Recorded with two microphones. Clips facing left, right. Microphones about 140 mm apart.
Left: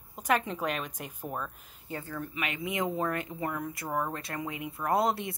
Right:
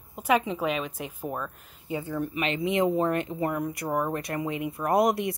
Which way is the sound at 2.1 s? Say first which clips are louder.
Right 7 dB; 20° right (ahead or behind).